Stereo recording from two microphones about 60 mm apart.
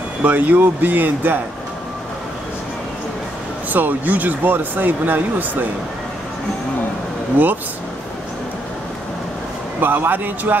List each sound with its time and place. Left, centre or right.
0.2 s speech: right
3.7 s speech: right
7.4 s speech: right
9.8 s speech: right